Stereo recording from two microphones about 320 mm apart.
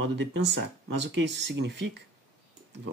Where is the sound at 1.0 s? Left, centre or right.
Right.